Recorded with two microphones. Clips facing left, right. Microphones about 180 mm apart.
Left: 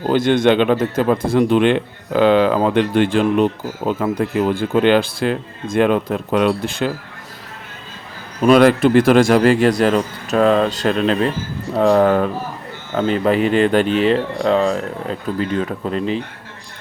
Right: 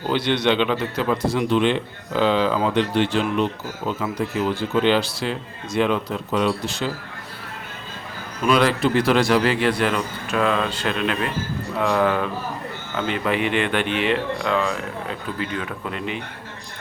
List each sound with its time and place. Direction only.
0.1 s speech: 45° left (ahead or behind)
8.4 s speech: 45° left (ahead or behind)